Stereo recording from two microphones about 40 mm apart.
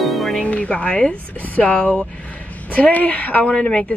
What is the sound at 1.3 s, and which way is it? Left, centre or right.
Speech, left.